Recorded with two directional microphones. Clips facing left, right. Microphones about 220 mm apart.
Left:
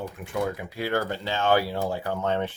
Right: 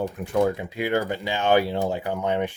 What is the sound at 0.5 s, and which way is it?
Speech, 15° right (ahead or behind).